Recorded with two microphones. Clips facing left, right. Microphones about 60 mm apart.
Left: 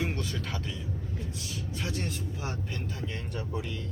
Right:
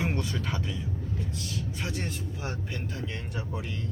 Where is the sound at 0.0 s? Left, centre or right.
Centre.